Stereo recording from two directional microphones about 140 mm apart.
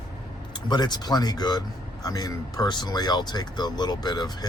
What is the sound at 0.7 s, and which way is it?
Speech, 30° left (ahead or behind).